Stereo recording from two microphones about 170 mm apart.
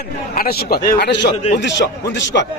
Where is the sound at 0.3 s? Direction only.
65° left (ahead or behind).